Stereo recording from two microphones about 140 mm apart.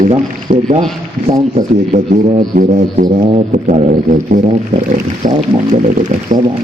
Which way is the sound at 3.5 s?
65° right (ahead or behind).